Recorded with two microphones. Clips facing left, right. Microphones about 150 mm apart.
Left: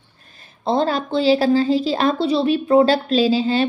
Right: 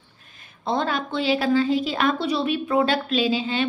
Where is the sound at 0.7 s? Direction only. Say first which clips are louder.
Left 5 dB; 35° left (ahead or behind).